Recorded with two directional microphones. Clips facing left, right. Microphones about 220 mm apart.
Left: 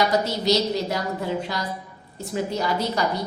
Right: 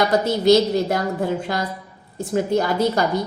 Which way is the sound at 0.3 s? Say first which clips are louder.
Right 7 dB; 50° right (ahead or behind).